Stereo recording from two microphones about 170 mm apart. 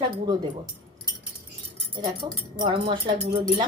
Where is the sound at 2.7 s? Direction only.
30° right (ahead or behind).